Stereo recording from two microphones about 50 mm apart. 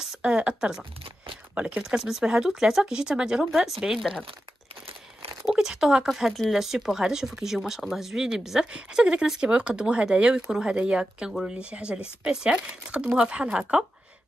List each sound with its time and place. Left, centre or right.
0.0 s a sound: centre
1.8 s speech: centre
5.5 s speech: centre
11.7 s speech: right